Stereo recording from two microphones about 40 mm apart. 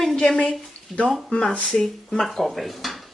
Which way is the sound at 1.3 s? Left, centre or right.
Left.